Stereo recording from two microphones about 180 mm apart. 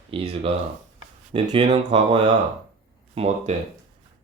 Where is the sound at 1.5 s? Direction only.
25° right (ahead or behind).